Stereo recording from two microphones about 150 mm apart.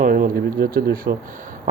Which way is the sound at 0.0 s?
70° right (ahead or behind).